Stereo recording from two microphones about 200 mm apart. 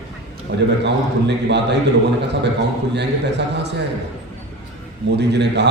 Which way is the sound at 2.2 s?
60° right (ahead or behind).